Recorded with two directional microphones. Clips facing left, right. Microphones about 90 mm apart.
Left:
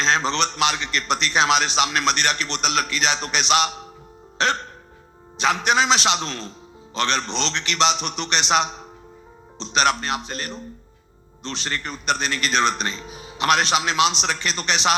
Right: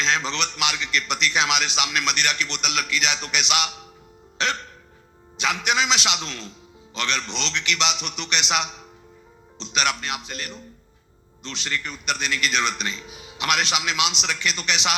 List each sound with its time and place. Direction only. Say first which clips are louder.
0.0 s a man's voice: left 4 dB; 40° left (ahead or behind)
4.4 s music: left 4 dB; 40° left (ahead or behind)
5.4 s a man's voice: left 4 dB; 40° left (ahead or behind)